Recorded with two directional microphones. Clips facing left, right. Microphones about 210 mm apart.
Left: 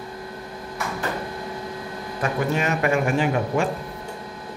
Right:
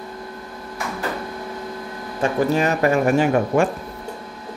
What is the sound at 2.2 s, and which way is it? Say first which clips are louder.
Speech: right 5 dB; 35° right (ahead or behind).